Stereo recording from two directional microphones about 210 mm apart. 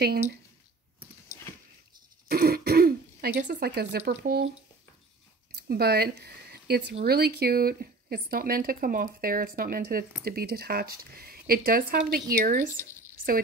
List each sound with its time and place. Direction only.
2.2 s speech: 45° right (ahead or behind)
5.7 s speech: 50° right (ahead or behind)